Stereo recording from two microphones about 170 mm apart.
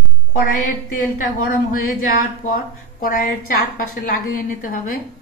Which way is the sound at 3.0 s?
60° left (ahead or behind).